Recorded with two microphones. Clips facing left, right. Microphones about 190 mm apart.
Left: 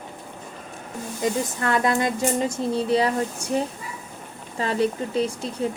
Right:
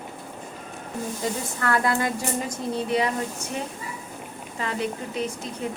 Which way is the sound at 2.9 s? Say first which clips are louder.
Left 3 dB; 30° left (ahead or behind).